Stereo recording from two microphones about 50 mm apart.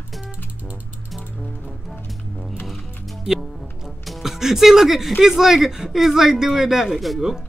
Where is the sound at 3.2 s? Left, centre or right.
Centre.